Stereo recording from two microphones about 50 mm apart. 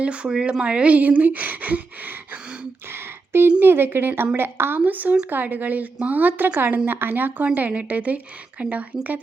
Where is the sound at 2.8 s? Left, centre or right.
Right.